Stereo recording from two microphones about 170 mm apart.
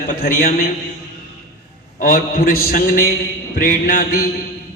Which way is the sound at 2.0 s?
55° left (ahead or behind).